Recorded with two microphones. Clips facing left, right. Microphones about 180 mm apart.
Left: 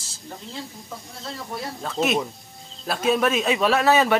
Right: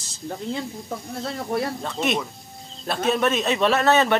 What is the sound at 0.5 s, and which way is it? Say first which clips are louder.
Speech: right 7 dB; 55° right (ahead or behind).